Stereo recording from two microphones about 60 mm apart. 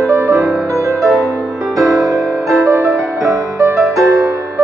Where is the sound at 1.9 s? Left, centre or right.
Right.